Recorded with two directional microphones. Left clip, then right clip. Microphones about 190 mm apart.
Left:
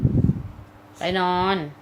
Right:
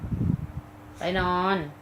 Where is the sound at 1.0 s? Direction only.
45° left (ahead or behind).